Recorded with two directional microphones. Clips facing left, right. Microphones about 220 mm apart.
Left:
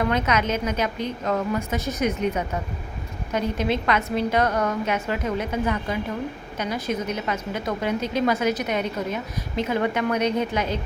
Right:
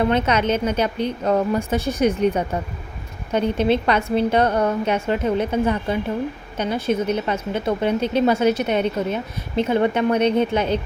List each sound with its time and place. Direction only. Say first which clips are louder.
0.0 s a woman's voice: right 4 dB; 30° right (ahead or behind)